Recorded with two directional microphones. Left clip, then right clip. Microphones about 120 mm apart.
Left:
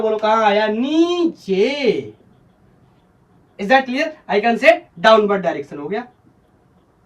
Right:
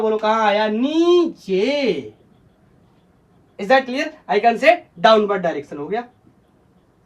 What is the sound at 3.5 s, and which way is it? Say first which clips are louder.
Speech: left 1 dB; 25° right (ahead or behind).